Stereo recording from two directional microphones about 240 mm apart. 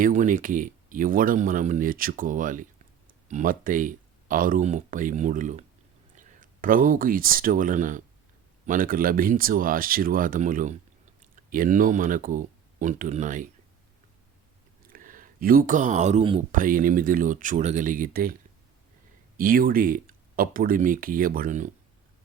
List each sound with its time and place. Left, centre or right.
0.0 s speech: right
14.8 s speech: right
19.4 s speech: right